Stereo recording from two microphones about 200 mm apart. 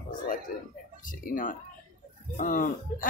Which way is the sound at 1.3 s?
40° left (ahead or behind).